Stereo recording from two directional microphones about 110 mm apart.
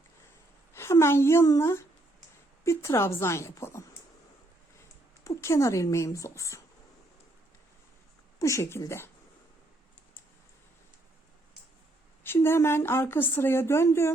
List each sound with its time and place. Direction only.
0.7 s a woman's voice: 25° left (ahead or behind)
5.2 s speech: 30° left (ahead or behind)
8.4 s speech: 30° left (ahead or behind)
12.2 s speech: 20° left (ahead or behind)